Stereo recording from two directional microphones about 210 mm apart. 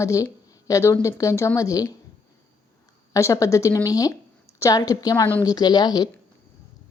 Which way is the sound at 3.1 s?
15° left (ahead or behind).